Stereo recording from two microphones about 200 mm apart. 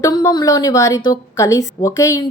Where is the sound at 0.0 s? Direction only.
20° left (ahead or behind).